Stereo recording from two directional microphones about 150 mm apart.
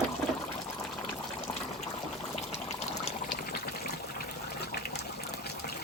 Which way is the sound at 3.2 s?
85° left.